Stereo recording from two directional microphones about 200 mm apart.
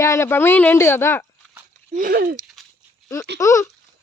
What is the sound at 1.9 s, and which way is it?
Speech, 45° right (ahead or behind).